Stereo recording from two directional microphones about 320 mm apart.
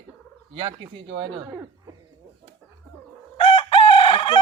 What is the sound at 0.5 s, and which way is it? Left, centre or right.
Speech, centre.